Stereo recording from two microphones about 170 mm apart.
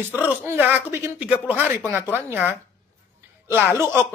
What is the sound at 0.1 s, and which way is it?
Speech, 10° right (ahead or behind).